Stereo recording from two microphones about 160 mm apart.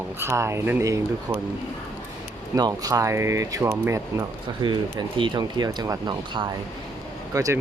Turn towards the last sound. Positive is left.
turn(degrees=-20)  # may be behind; listen again after turning